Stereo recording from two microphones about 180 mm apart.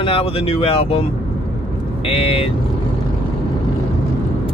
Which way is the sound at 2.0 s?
30° left (ahead or behind).